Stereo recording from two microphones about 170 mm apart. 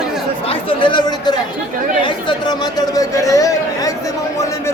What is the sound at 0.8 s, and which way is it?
A man's voice, 30° left (ahead or behind).